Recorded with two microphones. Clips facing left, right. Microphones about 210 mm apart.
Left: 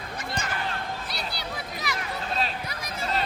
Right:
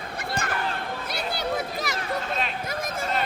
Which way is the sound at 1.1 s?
50° right (ahead or behind).